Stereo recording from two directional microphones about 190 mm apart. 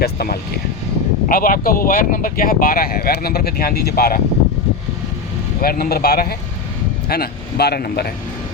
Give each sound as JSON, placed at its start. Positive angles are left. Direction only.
{"t": 0.0, "sound": "speech", "side_deg": 55}
{"t": 5.6, "sound": "a man's voice", "side_deg": 50}